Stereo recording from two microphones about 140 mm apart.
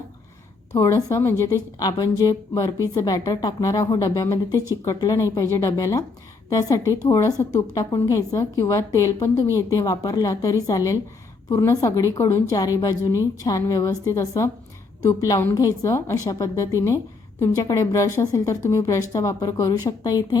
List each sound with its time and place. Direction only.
0.7 s a woman's voice: 20° left (ahead or behind)